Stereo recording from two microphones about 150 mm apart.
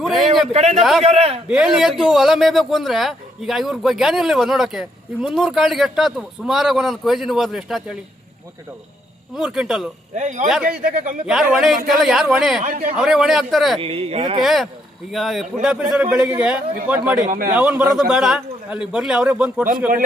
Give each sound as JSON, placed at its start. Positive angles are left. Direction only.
{"t": 0.5, "sound": "speech", "side_deg": -45}
{"t": 0.8, "sound": "a man's voice", "side_deg": 0}
{"t": 1.0, "sound": "speech", "side_deg": -40}
{"t": 1.5, "sound": "a man's voice", "side_deg": -5}
{"t": 9.3, "sound": "a man's voice", "side_deg": -5}
{"t": 10.2, "sound": "speech", "side_deg": -55}
{"t": 11.3, "sound": "a man's voice", "side_deg": 0}
{"t": 12.6, "sound": "speech", "side_deg": -60}
{"t": 13.0, "sound": "a man's voice", "side_deg": -5}
{"t": 13.7, "sound": "speech", "side_deg": -40}
{"t": 14.4, "sound": "a man's voice", "side_deg": 0}
{"t": 17.2, "sound": "a man's voice", "side_deg": -70}
{"t": 17.5, "sound": "a man's voice", "side_deg": -10}